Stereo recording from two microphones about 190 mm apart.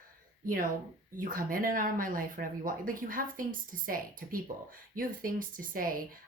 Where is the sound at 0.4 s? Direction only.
45° right (ahead or behind).